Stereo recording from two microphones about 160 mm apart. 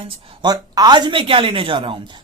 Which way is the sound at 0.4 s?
25° right (ahead or behind).